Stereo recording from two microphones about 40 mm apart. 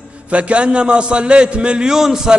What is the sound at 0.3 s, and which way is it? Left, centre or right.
A man's voice, right.